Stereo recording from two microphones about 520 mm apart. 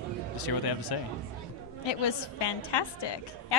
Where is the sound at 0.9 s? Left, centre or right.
Left.